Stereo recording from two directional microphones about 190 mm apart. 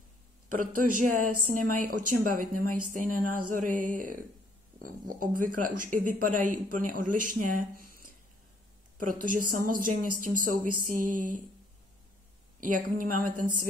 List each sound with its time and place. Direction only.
0.7 s a woman's voice: 45° right (ahead or behind)
7.7 s a sound: 50° right (ahead or behind)
8.9 s a woman's voice: 45° right (ahead or behind)
12.5 s a woman's voice: 45° right (ahead or behind)